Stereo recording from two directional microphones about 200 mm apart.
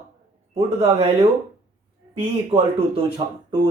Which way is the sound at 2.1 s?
30° right (ahead or behind).